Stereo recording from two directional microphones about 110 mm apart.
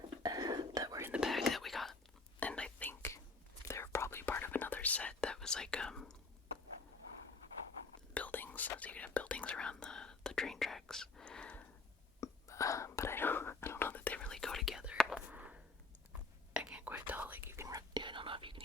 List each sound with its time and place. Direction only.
0.2 s whispering: 35° right (ahead or behind)
1.1 s whispering: 5° right (ahead or behind)
8.1 s whispering: 15° left (ahead or behind)
12.2 s whispering: 30° left (ahead or behind); by 18.6 s 50° right (ahead or behind)